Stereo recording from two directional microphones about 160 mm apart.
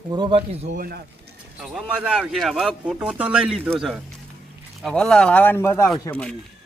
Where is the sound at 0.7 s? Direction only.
70° right (ahead or behind).